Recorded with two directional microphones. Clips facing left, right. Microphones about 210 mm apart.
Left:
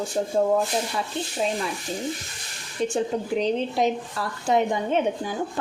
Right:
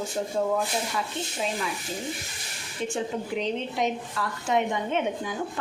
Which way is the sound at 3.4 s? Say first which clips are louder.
Left 5 dB; 35° left (ahead or behind).